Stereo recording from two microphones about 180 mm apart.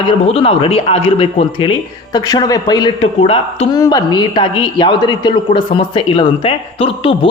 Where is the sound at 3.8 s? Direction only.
20° left (ahead or behind).